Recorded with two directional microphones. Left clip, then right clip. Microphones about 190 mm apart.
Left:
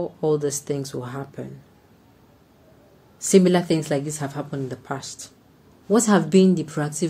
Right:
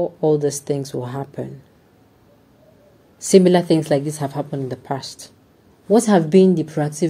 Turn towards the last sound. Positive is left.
turn(degrees=-5)  # may be behind; listen again after turning